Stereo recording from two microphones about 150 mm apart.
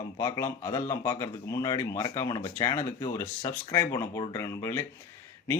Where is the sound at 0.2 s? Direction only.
20° left (ahead or behind).